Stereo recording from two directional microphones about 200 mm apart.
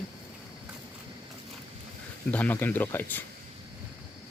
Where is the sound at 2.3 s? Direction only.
10° left (ahead or behind).